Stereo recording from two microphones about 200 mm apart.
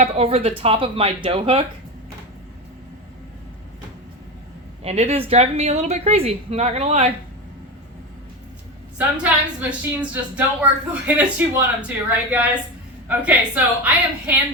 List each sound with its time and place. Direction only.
0.0 s speech: 30° right (ahead or behind)
4.8 s a woman's voice: 30° right (ahead or behind)
9.0 s a woman's voice: 5° right (ahead or behind)